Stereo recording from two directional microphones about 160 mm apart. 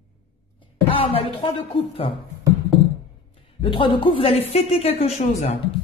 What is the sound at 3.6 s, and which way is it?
A woman's voice, 35° left (ahead or behind).